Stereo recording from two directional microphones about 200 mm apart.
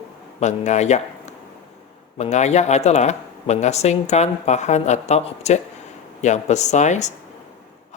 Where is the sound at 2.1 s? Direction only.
35° left (ahead or behind).